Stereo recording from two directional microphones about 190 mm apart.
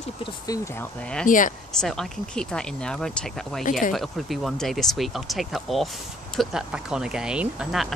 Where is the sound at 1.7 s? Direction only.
5° left (ahead or behind).